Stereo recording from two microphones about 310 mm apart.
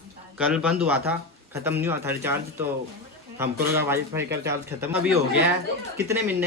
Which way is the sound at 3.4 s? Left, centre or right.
Centre.